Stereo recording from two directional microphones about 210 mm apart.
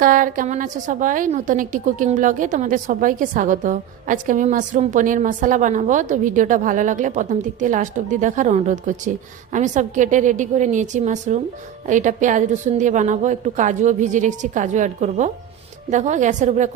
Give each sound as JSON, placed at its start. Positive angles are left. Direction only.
{"t": 0.0, "sound": "a woman's voice", "side_deg": -40}